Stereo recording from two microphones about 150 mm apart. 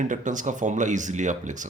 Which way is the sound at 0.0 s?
60° right (ahead or behind).